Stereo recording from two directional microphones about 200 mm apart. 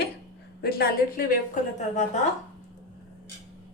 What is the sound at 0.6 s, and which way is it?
Speech, 50° left (ahead or behind).